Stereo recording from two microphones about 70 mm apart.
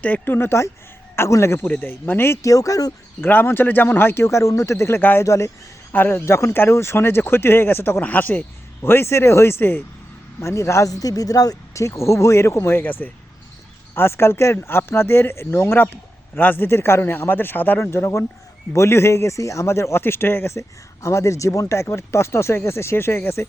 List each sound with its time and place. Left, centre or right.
0.0 s speech: left
0.3 s speech: left
1.6 s speech: left
2.4 s speech: left
3.2 s speech: left
4.9 s speech: left
5.2 s speech: left
5.9 s speech: left
8.8 s speech: left
10.4 s speech: left
12.8 s speech: left
20.6 s speech: left